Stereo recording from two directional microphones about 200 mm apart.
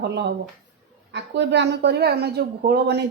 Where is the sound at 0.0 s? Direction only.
55° right (ahead or behind).